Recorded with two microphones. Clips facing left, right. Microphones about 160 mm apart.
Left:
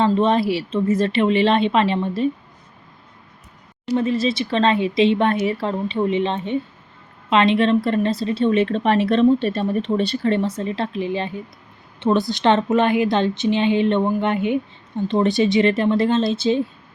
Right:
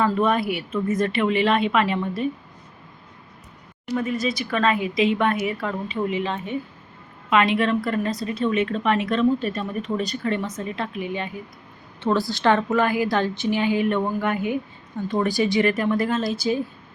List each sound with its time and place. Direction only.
0.0 s a woman's voice: 25° left (ahead or behind)
3.9 s a woman's voice: 30° left (ahead or behind)
11.9 s a woman's voice: 20° left (ahead or behind)